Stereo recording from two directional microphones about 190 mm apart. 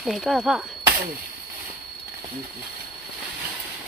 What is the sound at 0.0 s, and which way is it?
Speech, centre (ahead or behind).